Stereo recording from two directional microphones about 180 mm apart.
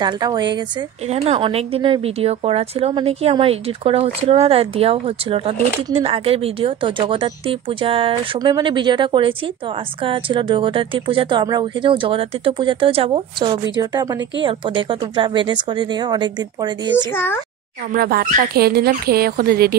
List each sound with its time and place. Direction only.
0.0 s speech: 25° right (ahead or behind)
1.0 s a woman's voice: 35° right (ahead or behind)
16.9 s a child's voice: 10° left (ahead or behind)
17.9 s speech: 55° right (ahead or behind)